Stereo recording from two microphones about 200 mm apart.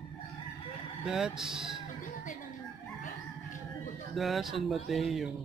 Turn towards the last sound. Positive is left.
turn(degrees=0)  # may be behind; listen again after turning